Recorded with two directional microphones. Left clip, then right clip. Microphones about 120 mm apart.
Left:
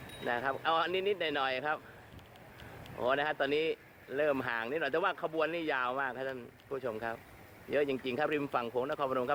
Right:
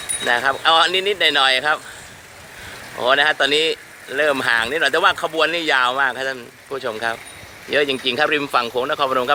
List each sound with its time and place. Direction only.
0.3 s speech: 10° right (ahead or behind)
3.0 s speech: 15° right (ahead or behind)